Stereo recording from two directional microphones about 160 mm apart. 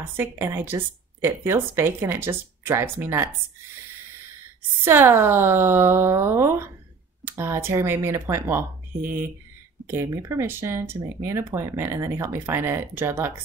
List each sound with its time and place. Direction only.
0.0 s speech: 15° right (ahead or behind)
4.8 s speech: 15° right (ahead or behind)